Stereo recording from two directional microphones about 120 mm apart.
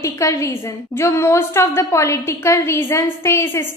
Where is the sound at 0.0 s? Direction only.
25° left (ahead or behind).